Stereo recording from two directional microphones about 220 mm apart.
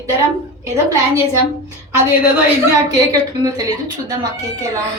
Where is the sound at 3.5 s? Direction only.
15° right (ahead or behind).